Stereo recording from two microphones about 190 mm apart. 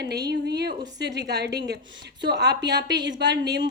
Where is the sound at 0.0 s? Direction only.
60° right (ahead or behind).